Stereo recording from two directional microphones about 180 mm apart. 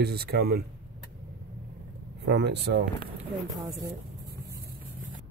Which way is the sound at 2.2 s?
70° right (ahead or behind).